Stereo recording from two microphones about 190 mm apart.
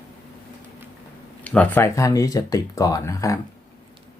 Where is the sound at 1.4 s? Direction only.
5° left (ahead or behind).